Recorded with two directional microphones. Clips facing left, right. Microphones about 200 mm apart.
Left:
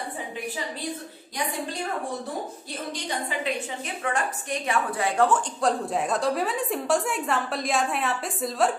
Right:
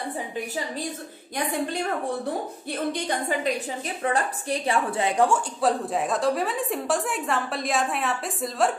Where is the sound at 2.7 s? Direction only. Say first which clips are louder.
Right 7 dB; 55° right (ahead or behind).